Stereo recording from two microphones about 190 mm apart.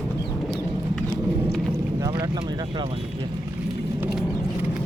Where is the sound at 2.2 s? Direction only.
20° right (ahead or behind).